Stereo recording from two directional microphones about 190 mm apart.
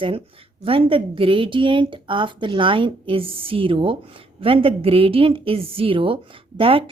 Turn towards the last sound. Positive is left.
turn(degrees=-30)  # may be behind; listen again after turning